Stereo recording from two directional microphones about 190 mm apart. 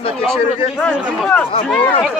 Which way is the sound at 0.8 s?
5° left (ahead or behind).